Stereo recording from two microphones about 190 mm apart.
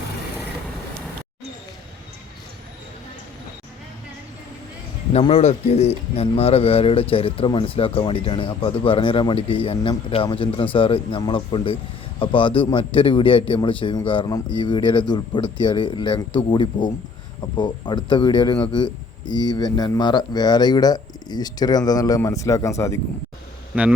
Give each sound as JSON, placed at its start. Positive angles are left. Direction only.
{"t": 5.1, "sound": "speech", "side_deg": 30}
{"t": 23.7, "sound": "a man's voice", "side_deg": -5}